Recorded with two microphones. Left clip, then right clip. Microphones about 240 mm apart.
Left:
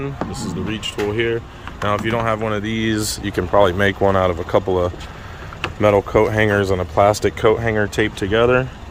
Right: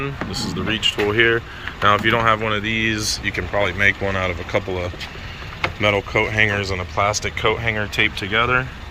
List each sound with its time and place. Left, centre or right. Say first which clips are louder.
0.3 s speech: right 3 dB; centre; by 8.6 s left